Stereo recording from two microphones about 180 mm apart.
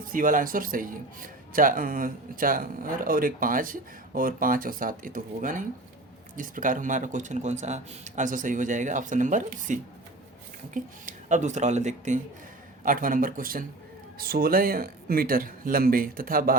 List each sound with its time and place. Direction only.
0.0 s speech: 50° right (ahead or behind)
11.0 s speech: 45° right (ahead or behind)